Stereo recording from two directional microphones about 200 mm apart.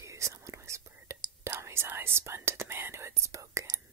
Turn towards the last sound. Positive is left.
turn(degrees=-15)  # may be behind; listen again after turning